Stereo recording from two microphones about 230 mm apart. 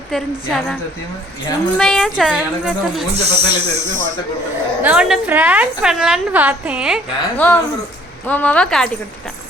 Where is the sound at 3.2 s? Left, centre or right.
Right.